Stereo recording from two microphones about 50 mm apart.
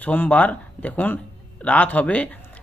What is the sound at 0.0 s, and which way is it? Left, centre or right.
Speech, left.